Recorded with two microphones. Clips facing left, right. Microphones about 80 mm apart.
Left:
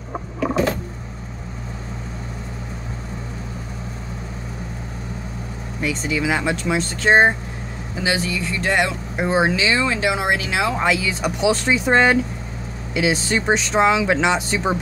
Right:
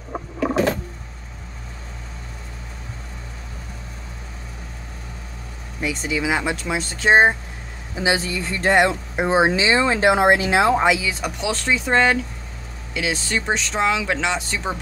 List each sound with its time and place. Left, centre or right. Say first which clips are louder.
5.8 s speech: left 1 dB; centre
7.9 s speech: right 1 dB; right
10.8 s speech: right 1 dB; centre